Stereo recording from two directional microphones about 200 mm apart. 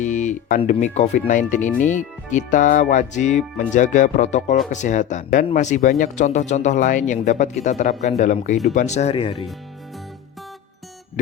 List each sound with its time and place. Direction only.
0.0 s music: 40° left (ahead or behind)
0.7 s speech: 35° left (ahead or behind)